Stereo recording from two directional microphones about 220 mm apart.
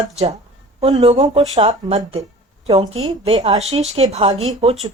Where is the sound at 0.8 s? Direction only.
30° right (ahead or behind).